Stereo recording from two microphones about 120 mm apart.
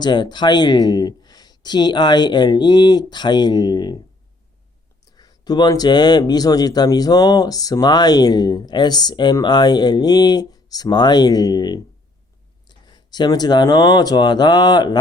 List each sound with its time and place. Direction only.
0.0 s speech: 40° left (ahead or behind)
5.1 s speech: 35° left (ahead or behind)